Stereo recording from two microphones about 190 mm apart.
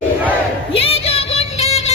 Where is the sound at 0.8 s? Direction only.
30° left (ahead or behind).